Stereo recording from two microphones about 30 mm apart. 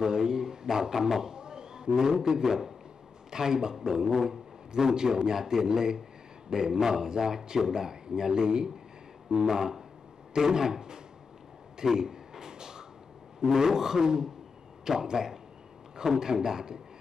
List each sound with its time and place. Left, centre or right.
0.0 s a sound: right
2.0 s a man's voice: centre
4.1 s a man's voice: centre
4.7 s a man's voice: right
11.8 s a sound: centre
13.5 s a man's voice: centre